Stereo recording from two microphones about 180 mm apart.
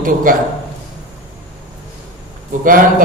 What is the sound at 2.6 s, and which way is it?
Speech, 50° right (ahead or behind).